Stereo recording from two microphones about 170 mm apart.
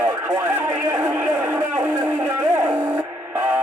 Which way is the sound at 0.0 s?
15° right (ahead or behind).